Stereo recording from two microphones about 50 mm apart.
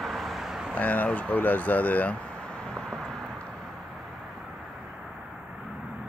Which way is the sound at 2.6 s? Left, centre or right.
Centre.